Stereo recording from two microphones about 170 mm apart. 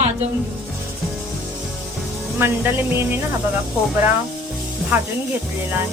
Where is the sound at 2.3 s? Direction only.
15° right (ahead or behind).